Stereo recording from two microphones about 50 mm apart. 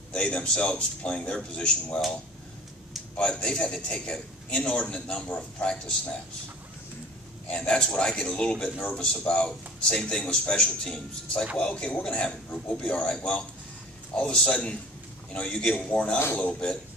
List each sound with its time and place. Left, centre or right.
0.1 s a man's voice: centre
3.2 s a man's voice: centre
7.4 s a man's voice: left
16.3 s a man's voice: left